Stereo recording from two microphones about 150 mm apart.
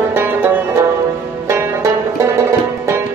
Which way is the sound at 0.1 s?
15° right (ahead or behind).